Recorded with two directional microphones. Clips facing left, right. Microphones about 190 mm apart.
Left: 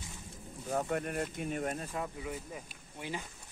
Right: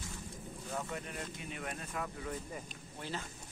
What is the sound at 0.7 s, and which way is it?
Speech, 50° left (ahead or behind).